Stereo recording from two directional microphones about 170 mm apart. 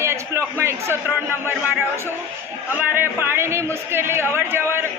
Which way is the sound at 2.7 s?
15° right (ahead or behind).